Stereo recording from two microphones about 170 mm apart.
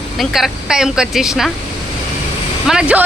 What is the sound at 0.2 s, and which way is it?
Speech, centre (ahead or behind).